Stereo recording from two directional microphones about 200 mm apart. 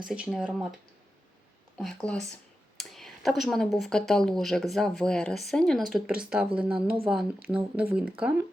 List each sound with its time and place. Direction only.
0.0 s speech: 5° right (ahead or behind)
1.8 s speech: 5° left (ahead or behind)
6.7 s speech: 25° right (ahead or behind)
7.5 s speech: 5° right (ahead or behind)